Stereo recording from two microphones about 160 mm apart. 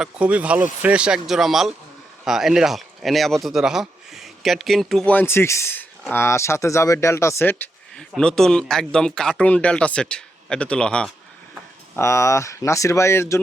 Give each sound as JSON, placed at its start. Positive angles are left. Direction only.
{"t": 0.0, "sound": "a man's voice", "side_deg": -10}
{"t": 11.9, "sound": "speech", "side_deg": 20}